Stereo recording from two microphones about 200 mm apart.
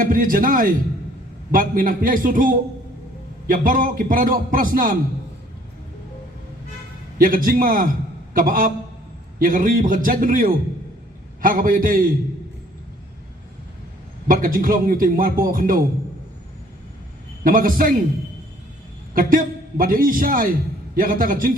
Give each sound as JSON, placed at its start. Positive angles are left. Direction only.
{"t": 0.0, "sound": "a man's voice", "side_deg": -45}
{"t": 7.2, "sound": "a man's voice", "side_deg": -45}
{"t": 14.3, "sound": "a man's voice", "side_deg": -45}
{"t": 17.4, "sound": "a man's voice", "side_deg": -45}
{"t": 19.1, "sound": "a man's voice", "side_deg": -45}